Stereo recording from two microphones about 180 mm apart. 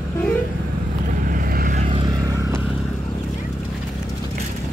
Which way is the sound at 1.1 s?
50° right (ahead or behind).